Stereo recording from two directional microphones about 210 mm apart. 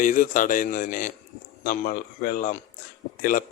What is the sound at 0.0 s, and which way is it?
Speech, 40° left (ahead or behind).